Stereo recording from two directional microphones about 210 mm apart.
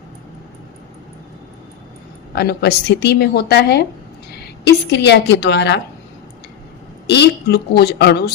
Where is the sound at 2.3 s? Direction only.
50° left (ahead or behind).